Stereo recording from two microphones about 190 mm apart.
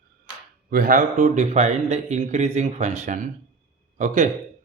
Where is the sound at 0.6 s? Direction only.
45° right (ahead or behind).